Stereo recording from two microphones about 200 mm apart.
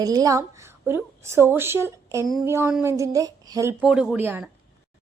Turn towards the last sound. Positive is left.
turn(degrees=-10)  # may be behind; listen again after turning